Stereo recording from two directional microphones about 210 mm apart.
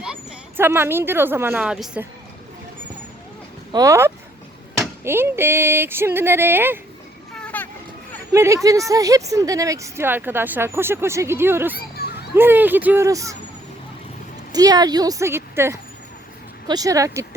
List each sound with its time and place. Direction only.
0.0 s speech: 5° right (ahead or behind)
3.7 s a woman's voice: 15° right (ahead or behind)
7.3 s vehicle: 5° left (ahead or behind)
8.3 s a woman's voice: 15° right (ahead or behind)
14.5 s a woman's voice: 20° right (ahead or behind)